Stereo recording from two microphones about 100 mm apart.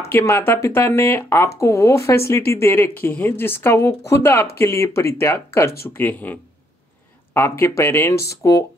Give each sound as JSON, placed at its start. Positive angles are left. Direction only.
{"t": 0.0, "sound": "speech", "side_deg": 30}